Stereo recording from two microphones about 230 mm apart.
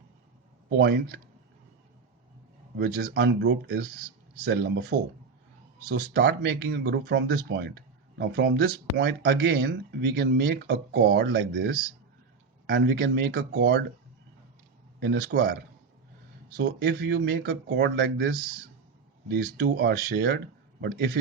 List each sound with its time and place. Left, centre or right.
0.8 s speech: right
2.7 s speech: right
15.0 s speech: right
16.6 s speech: right